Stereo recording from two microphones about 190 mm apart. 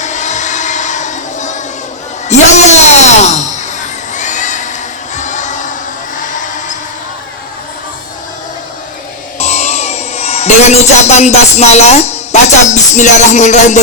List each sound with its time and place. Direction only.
0.0 s a sound: 40° left (ahead or behind)
5.1 s crowd: 40° left (ahead or behind)
9.4 s music: 35° left (ahead or behind)
12.9 s speech: 40° left (ahead or behind)